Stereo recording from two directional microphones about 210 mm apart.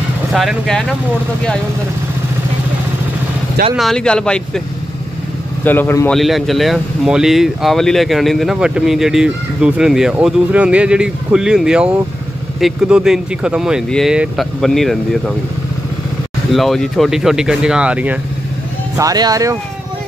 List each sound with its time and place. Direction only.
0.3 s speech: centre (ahead or behind)
3.7 s speech: centre (ahead or behind)
5.6 s speech: 10° left (ahead or behind)
16.5 s speech: centre (ahead or behind)
18.9 s speech: 15° right (ahead or behind)